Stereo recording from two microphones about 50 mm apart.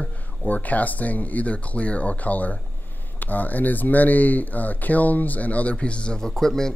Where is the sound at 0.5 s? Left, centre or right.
Left.